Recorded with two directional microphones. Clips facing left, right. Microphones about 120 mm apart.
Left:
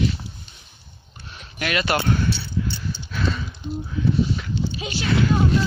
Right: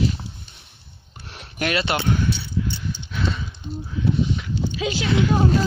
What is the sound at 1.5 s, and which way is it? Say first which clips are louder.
Speech: right 2 dB; 35° right (ahead or behind).